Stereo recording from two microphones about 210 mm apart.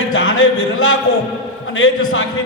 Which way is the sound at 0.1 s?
75° left (ahead or behind).